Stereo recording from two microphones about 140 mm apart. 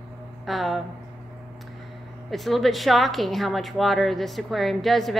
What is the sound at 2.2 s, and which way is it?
A woman's voice, centre (ahead or behind).